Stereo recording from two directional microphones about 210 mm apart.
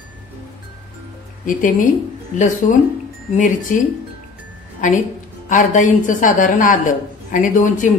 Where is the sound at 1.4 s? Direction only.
40° left (ahead or behind).